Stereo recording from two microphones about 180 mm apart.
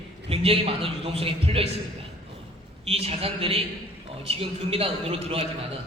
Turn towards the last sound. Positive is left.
turn(degrees=-30)  # may be behind; listen again after turning